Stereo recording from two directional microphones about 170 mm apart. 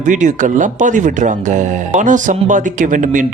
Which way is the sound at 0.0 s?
45° right (ahead or behind).